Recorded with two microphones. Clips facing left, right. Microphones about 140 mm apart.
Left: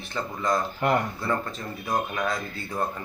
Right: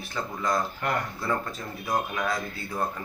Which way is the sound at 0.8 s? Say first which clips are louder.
Left 9 dB; 25° left (ahead or behind).